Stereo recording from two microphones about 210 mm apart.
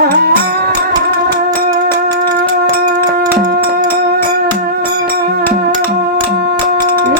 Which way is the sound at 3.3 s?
45° right (ahead or behind).